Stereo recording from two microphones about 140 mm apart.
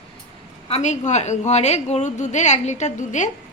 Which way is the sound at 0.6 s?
50° left (ahead or behind).